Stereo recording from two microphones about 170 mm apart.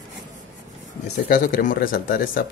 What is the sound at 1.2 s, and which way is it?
Speech, 55° left (ahead or behind).